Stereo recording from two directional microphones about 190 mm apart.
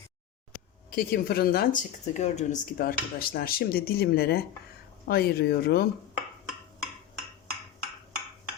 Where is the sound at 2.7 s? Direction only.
55° left (ahead or behind).